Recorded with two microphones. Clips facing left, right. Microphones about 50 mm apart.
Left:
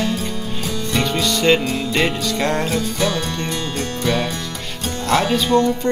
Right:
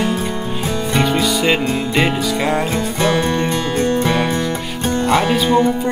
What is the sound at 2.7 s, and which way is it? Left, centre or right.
Music, right.